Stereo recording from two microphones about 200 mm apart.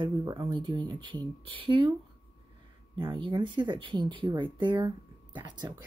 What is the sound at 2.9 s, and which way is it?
Speech, 25° right (ahead or behind).